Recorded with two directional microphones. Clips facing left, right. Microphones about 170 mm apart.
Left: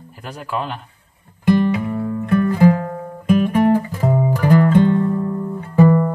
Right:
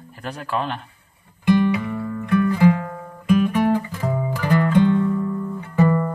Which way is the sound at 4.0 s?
30° left (ahead or behind).